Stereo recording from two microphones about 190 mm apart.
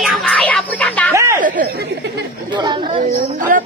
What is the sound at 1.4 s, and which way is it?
Chatter, 45° right (ahead or behind).